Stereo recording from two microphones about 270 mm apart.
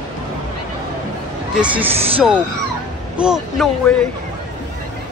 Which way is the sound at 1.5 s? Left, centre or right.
Centre.